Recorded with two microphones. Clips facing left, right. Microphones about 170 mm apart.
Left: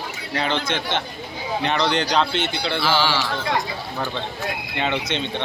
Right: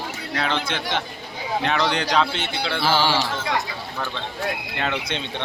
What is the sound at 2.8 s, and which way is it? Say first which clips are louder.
Speech: right 1 dB; 45° right (ahead or behind).